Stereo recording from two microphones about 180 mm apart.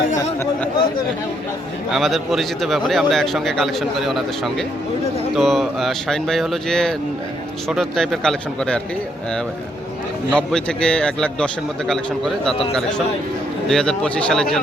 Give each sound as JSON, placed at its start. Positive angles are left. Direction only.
{"t": 1.9, "sound": "a man's voice", "side_deg": 0}
{"t": 10.3, "sound": "a man's voice", "side_deg": 5}
{"t": 13.7, "sound": "a man's voice", "side_deg": 5}